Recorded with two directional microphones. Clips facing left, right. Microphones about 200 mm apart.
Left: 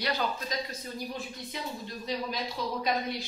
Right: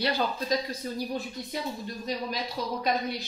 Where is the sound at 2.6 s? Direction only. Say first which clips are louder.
Right 1 dB; 40° right (ahead or behind).